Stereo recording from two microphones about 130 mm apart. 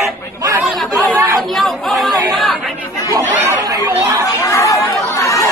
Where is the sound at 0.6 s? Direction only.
15° right (ahead or behind).